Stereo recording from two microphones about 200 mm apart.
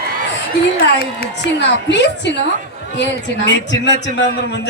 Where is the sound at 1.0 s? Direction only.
55° left (ahead or behind).